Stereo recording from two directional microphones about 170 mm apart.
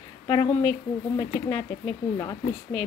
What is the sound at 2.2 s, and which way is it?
Speech, 20° left (ahead or behind).